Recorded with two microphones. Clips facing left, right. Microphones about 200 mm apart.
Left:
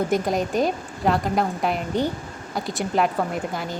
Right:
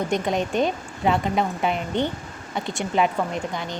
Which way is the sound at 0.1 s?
Centre (ahead or behind).